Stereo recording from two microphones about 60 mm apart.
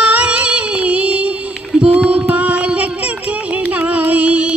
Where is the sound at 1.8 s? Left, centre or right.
Centre.